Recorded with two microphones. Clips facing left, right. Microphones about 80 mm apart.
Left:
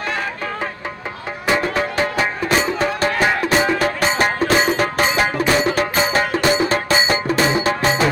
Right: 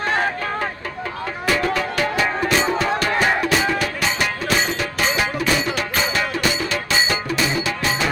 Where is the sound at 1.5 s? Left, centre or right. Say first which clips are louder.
Left 2 dB; left.